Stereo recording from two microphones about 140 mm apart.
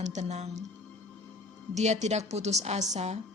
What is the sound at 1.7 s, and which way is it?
A woman's voice, 55° right (ahead or behind).